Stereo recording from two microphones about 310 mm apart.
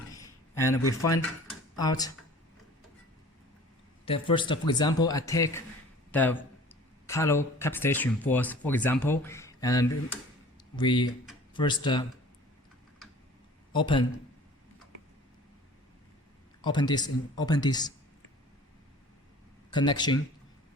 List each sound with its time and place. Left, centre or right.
0.1 s a sound: centre
0.8 s speech: left
1.7 s speech: centre
4.0 s speech: centre
13.7 s speech: centre
16.6 s speech: centre
19.7 s speech: centre